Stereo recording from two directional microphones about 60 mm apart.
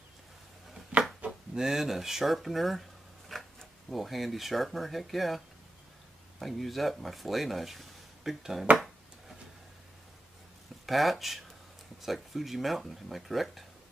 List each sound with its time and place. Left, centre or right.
0.9 s a sound: right
1.6 s speech: centre
6.4 s speech: centre
10.9 s speech: centre